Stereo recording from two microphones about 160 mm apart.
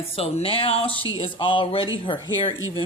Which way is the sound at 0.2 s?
35° left (ahead or behind).